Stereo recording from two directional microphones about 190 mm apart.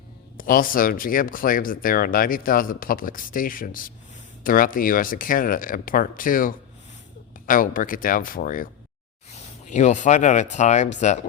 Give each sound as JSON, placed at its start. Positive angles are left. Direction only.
{"t": 0.3, "sound": "speech", "side_deg": 45}
{"t": 9.6, "sound": "speech", "side_deg": 40}